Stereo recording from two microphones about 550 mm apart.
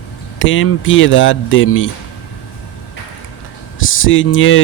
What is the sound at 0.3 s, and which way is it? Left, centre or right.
Speech, left.